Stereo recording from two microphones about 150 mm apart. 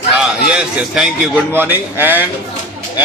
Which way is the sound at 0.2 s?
5° right (ahead or behind).